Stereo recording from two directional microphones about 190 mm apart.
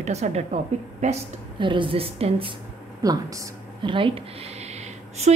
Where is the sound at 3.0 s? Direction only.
20° right (ahead or behind).